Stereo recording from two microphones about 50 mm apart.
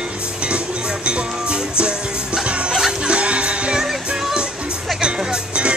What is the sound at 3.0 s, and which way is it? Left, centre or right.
Music, right.